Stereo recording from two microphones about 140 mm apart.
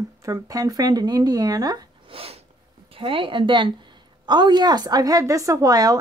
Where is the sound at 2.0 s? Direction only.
45° right (ahead or behind).